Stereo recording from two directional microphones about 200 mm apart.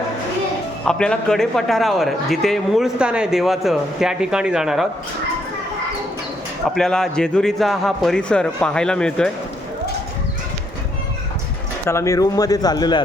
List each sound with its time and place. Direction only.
0.9 s a man's voice: 5° left (ahead or behind)
6.7 s a man's voice: 5° left (ahead or behind)
11.9 s a man's voice: 15° left (ahead or behind)